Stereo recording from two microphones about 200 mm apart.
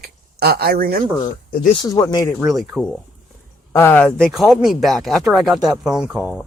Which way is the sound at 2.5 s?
Centre (ahead or behind).